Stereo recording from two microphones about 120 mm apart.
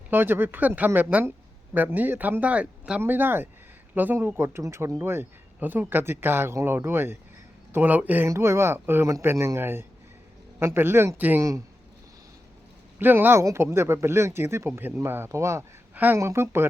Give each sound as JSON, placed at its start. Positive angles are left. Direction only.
{"t": 0.1, "sound": "speech", "side_deg": -15}
{"t": 13.0, "sound": "speech", "side_deg": -15}